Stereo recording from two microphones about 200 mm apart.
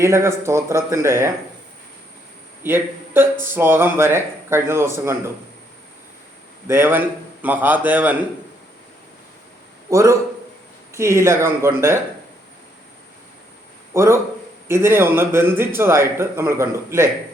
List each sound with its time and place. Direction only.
0.0 s a man's voice: 15° right (ahead or behind)
2.6 s a man's voice: 10° right (ahead or behind)
6.7 s a man's voice: 10° right (ahead or behind)
9.9 s a man's voice: 15° right (ahead or behind)
13.9 s a man's voice: 15° right (ahead or behind)